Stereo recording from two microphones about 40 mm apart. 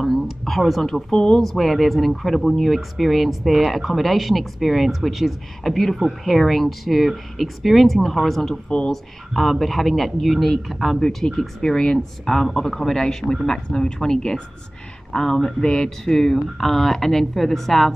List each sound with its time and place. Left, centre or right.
0.0 s speech: centre
1.1 s speech: centre
1.4 s speech: centre
8.6 s speech: left
8.9 s speech: centre
11.2 s speech: centre